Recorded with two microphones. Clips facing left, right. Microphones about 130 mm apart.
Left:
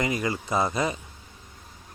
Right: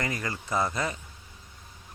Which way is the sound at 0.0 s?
15° left (ahead or behind).